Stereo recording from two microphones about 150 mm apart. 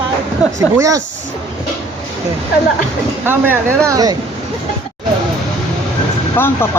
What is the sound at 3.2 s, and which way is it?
Speech, 15° right (ahead or behind).